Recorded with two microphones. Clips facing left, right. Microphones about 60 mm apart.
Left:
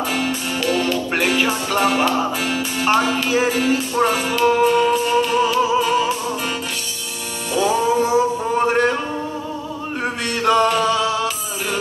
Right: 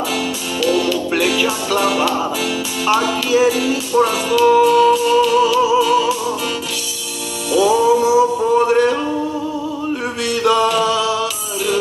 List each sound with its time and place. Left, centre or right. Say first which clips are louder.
0.1 s music: right 1 dB; left
7.5 s music: right 4 dB; left
8.5 s a sound: right 3 dB; left
10.4 s music: right 1 dB; left